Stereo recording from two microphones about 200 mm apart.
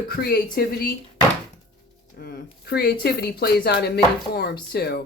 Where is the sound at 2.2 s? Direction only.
55° left (ahead or behind).